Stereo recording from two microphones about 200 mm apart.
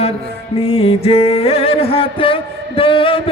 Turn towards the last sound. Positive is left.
turn(degrees=25)  # may be behind; listen again after turning